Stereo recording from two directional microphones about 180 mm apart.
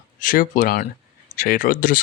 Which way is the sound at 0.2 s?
50° left (ahead or behind).